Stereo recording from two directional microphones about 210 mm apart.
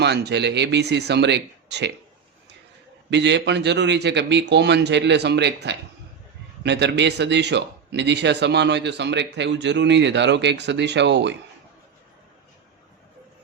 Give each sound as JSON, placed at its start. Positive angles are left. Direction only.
{"t": 0.0, "sound": "speech", "side_deg": -55}
{"t": 3.1, "sound": "a man's voice", "side_deg": -55}